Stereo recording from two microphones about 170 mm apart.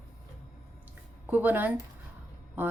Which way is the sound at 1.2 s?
10° right (ahead or behind).